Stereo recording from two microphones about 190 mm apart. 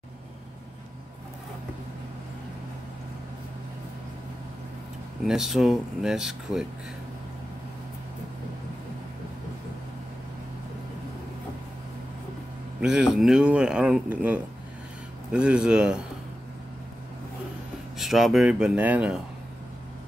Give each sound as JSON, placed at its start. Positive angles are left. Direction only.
{"t": 5.2, "sound": "speech", "side_deg": 0}
{"t": 12.8, "sound": "speech", "side_deg": -5}
{"t": 17.9, "sound": "speech", "side_deg": 0}